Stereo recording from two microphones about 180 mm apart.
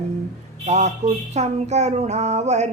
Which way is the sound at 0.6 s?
40° right (ahead or behind).